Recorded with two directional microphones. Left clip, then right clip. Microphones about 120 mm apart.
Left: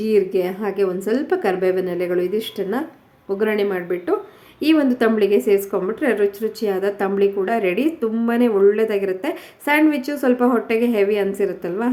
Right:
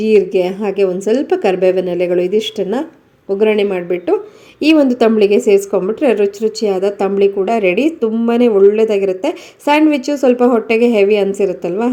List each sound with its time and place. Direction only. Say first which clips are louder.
0.0 s a woman's voice: right 6 dB; 30° right (ahead or behind)